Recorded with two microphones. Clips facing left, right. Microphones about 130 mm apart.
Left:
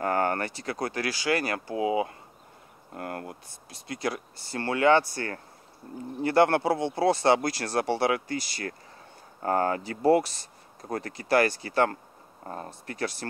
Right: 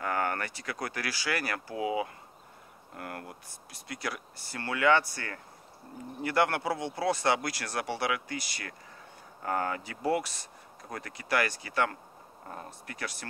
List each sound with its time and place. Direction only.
0.0 s speech: 35° left (ahead or behind)